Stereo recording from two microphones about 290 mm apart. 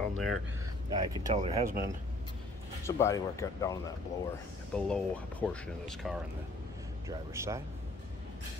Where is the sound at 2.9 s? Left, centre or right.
Centre.